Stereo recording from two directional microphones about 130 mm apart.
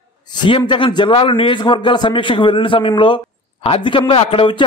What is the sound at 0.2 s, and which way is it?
A man's voice, 35° left (ahead or behind).